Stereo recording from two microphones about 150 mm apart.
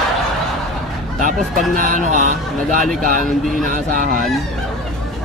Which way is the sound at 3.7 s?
65° right (ahead or behind).